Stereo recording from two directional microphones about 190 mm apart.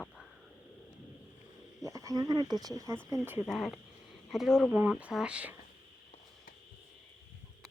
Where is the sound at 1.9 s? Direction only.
15° right (ahead or behind).